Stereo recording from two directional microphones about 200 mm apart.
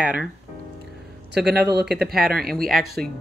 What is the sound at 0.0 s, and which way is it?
Speech, 5° right (ahead or behind).